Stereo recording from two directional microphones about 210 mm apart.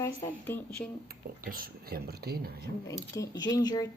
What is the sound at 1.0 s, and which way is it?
Speech, 45° right (ahead or behind).